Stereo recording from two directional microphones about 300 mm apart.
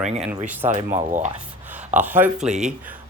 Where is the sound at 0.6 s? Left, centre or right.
Right.